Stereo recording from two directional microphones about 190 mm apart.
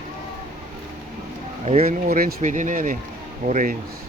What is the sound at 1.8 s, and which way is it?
Speech, 50° right (ahead or behind).